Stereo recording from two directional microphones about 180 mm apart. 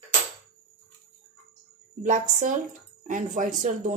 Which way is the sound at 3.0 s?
45° right (ahead or behind).